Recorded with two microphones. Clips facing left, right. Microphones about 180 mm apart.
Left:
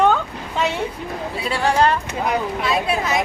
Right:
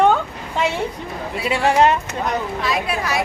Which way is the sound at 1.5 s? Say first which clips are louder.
Right 2 dB; 25° right (ahead or behind).